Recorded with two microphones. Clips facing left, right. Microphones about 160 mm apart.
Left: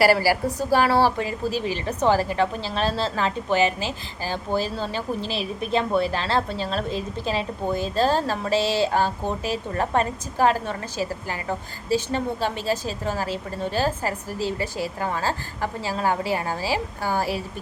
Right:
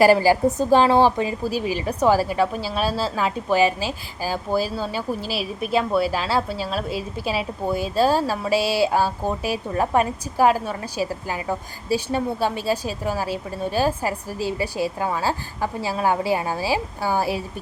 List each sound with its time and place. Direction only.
0.0 s a woman's voice: 20° right (ahead or behind)